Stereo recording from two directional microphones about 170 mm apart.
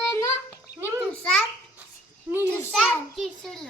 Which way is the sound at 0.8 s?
15° right (ahead or behind).